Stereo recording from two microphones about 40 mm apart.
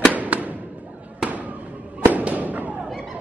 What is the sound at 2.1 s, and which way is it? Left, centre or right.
Fireworks, right.